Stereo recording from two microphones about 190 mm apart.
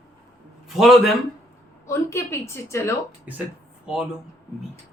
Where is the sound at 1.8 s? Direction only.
15° left (ahead or behind).